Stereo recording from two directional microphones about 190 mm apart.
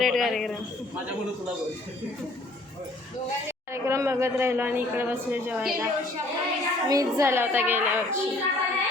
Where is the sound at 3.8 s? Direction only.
15° right (ahead or behind).